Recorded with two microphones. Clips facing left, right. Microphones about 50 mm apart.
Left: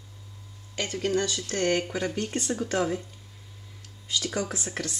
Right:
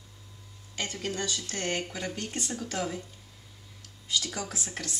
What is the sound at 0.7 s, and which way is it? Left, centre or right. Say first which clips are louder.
Speech: left 7 dB; left.